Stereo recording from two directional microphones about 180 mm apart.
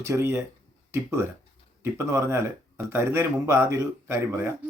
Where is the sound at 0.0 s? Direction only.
15° right (ahead or behind).